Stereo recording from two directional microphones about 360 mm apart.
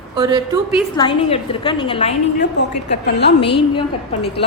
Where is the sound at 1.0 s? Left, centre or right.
Centre.